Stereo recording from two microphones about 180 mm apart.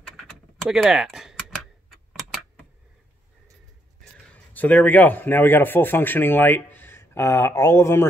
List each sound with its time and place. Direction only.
0.2 s typing: 5° left (ahead or behind)
4.0 s speech: 5° left (ahead or behind)